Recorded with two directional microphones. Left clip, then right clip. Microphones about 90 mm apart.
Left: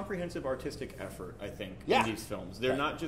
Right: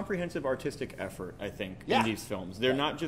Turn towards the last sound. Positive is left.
turn(degrees=-30)  # may be behind; listen again after turning